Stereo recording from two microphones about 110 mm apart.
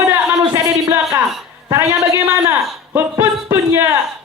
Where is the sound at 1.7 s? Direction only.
25° right (ahead or behind).